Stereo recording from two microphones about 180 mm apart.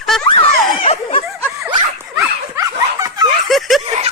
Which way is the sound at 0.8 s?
35° left (ahead or behind).